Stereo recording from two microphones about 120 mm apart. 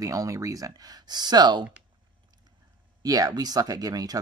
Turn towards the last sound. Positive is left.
turn(degrees=-30)  # may be behind; listen again after turning